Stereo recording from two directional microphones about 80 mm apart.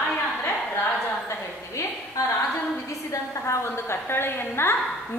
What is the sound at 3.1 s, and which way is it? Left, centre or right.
A woman's voice, left.